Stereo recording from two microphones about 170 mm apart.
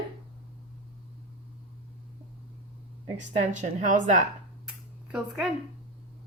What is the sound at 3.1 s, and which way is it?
A woman's voice, 45° right (ahead or behind).